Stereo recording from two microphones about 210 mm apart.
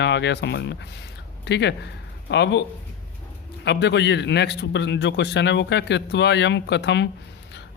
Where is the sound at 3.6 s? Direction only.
55° left (ahead or behind).